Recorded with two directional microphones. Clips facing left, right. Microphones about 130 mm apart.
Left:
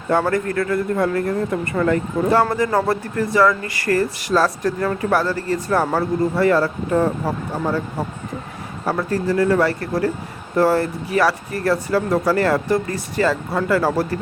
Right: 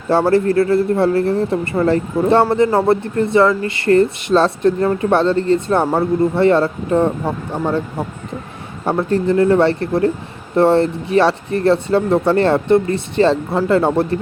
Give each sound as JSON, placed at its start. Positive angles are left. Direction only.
{"t": 0.1, "sound": "speech", "side_deg": -30}
{"t": 8.8, "sound": "speech", "side_deg": -25}